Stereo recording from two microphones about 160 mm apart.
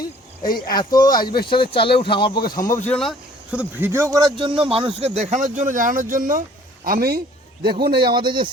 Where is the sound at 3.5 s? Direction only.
10° right (ahead or behind); by 6.4 s 55° right (ahead or behind).